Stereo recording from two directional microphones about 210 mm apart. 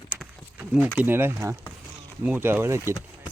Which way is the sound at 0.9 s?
10° right (ahead or behind).